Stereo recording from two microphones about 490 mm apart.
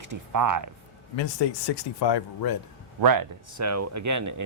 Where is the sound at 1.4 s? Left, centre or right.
Left.